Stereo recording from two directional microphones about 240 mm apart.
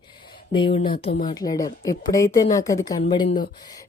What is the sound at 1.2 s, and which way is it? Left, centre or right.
Speech, centre.